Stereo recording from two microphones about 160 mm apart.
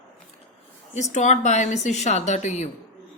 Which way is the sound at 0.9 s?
45° left (ahead or behind).